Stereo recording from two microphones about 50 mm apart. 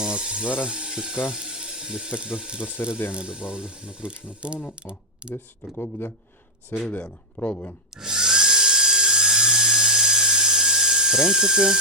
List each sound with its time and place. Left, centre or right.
0.0 s a sound: centre
0.6 s speech: centre
3.1 s ratchet: centre
4.7 s speech: right
5.7 s speech: left
7.4 s speech: left
7.9 s drill: centre